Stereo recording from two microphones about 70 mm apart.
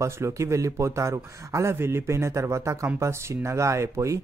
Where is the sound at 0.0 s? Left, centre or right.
Right.